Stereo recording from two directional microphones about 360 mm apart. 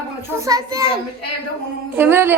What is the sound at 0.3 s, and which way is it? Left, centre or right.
Speech, centre.